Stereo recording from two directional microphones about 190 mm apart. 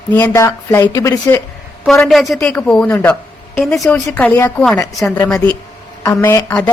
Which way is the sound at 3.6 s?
Centre (ahead or behind).